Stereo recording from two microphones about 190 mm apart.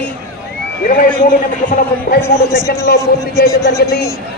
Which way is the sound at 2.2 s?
15° left (ahead or behind).